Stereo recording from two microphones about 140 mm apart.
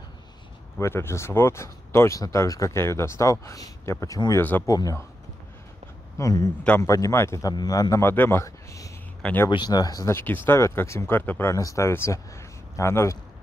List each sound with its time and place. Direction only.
0.7 s speech: 20° left (ahead or behind)
6.1 s speech: 20° left (ahead or behind)
9.5 s speech: 30° left (ahead or behind)